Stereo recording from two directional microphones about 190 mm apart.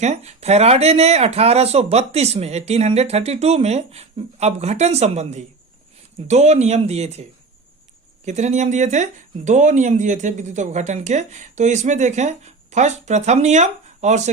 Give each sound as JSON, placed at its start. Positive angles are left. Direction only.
{"t": 0.0, "sound": "speech", "side_deg": -35}